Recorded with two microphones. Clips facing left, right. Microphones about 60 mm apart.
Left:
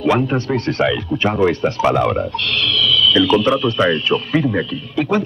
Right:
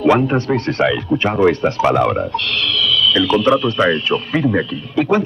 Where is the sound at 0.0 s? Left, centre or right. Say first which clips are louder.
Right 3 dB; right.